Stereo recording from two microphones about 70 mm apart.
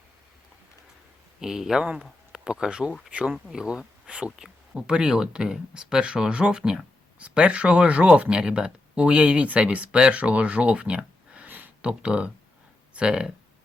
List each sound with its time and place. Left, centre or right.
1.4 s speech: centre
3.3 s speech: centre